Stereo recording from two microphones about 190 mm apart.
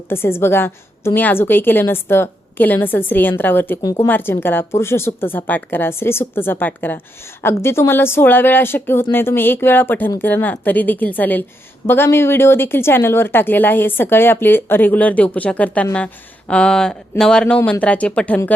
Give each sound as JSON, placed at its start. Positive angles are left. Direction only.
{"t": 0.1, "sound": "a woman's voice", "side_deg": 10}